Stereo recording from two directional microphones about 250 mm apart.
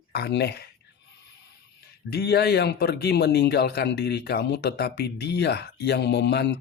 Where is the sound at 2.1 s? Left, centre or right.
Left.